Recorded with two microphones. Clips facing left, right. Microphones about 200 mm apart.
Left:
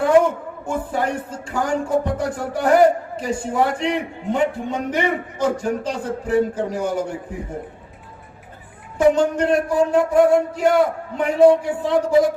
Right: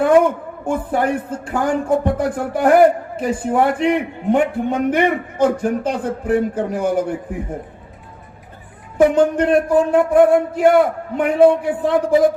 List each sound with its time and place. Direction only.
0.0 s speech: 55° right (ahead or behind)
9.0 s speech: 55° right (ahead or behind)